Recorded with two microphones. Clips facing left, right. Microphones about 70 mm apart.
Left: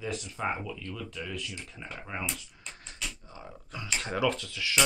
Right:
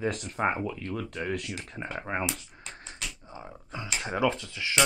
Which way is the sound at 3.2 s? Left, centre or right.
Right.